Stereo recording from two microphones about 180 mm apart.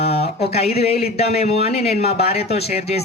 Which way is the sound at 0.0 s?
35° left (ahead or behind).